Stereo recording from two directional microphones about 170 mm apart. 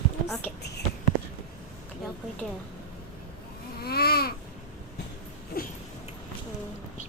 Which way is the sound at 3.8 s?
65° left (ahead or behind).